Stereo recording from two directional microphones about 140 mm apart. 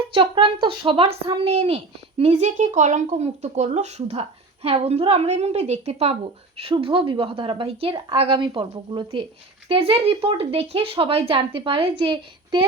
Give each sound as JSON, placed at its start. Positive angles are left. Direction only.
{"t": 0.1, "sound": "speech", "side_deg": -35}